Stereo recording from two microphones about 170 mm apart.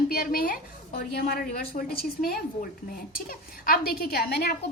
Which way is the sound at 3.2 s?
60° left (ahead or behind).